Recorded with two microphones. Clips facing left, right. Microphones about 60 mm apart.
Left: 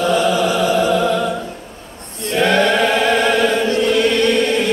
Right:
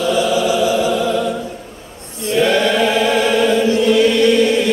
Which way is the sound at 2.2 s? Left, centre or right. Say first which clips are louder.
Even; left.